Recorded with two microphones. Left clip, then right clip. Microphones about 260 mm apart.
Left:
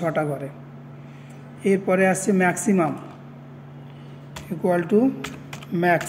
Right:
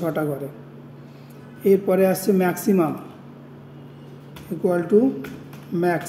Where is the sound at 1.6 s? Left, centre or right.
Left.